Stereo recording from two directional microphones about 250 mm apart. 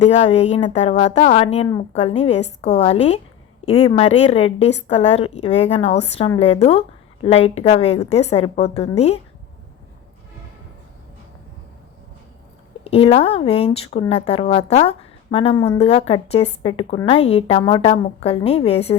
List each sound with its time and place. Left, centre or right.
0.0 s a woman's voice: left
12.8 s a woman's voice: left